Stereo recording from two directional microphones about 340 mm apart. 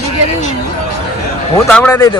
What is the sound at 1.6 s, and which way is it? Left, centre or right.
Speech, centre.